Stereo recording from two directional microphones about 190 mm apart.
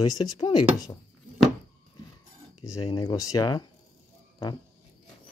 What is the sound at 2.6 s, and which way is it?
Speech, 20° left (ahead or behind).